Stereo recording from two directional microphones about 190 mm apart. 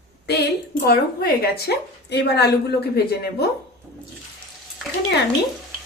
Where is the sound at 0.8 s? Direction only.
55° left (ahead or behind).